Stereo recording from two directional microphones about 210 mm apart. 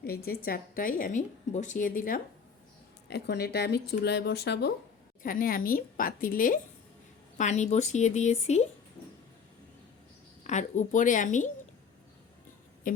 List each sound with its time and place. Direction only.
0.0 s a woman's voice: 45° left (ahead or behind)
3.1 s speech: 55° left (ahead or behind)
5.2 s a woman's voice: 40° left (ahead or behind)
10.4 s a woman's voice: 35° left (ahead or behind)